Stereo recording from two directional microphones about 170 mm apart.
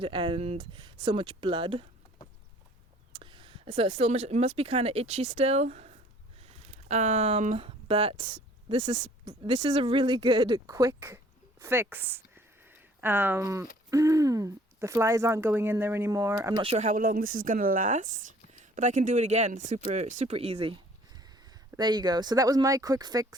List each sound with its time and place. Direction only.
0.0 s speech: 30° right (ahead or behind)
3.1 s speech: 30° right (ahead or behind)
16.6 s speech: 40° right (ahead or behind)
21.8 s speech: 25° right (ahead or behind)